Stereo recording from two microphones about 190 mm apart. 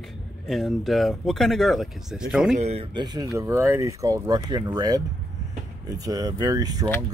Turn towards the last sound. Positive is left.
turn(degrees=-20)  # may be behind; listen again after turning